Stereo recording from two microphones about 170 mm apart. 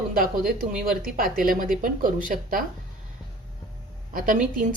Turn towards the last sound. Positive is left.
turn(degrees=-50)  # may be behind; listen again after turning